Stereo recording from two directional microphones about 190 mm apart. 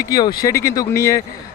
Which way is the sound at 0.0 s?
20° left (ahead or behind).